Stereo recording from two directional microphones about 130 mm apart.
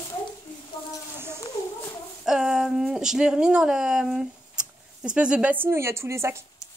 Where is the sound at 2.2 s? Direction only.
5° right (ahead or behind); by 6.4 s 20° right (ahead or behind).